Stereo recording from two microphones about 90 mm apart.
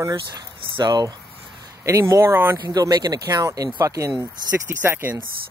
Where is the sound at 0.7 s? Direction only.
55° right (ahead or behind).